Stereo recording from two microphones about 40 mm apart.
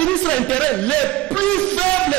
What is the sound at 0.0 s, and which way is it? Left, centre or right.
A man's voice, left.